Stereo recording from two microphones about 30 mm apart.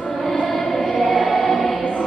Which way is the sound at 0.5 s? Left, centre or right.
Centre.